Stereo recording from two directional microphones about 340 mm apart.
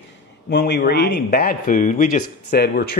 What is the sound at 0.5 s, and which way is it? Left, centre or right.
Speech, left.